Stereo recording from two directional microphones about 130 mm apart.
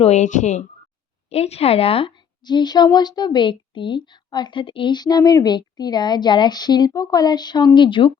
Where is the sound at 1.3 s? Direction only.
50° left (ahead or behind).